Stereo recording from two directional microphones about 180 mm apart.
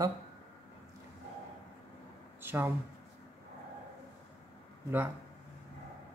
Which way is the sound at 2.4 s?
10° right (ahead or behind).